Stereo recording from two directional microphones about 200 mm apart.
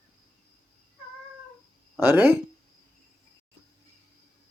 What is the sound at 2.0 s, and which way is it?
Speech, 10° right (ahead or behind).